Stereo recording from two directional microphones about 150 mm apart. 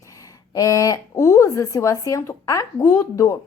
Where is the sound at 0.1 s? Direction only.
25° left (ahead or behind).